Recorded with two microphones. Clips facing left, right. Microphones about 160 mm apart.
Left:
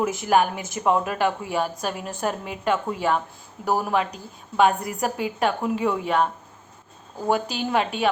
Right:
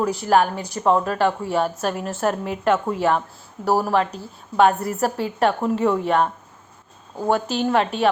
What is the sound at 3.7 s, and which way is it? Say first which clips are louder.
Speech: right 4 dB; 35° right (ahead or behind).